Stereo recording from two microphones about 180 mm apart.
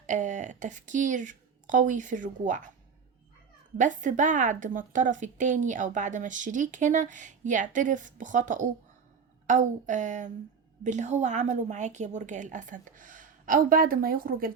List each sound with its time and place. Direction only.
0.0 s a woman's voice: 45° right (ahead or behind)
3.8 s a woman's voice: 45° right (ahead or behind)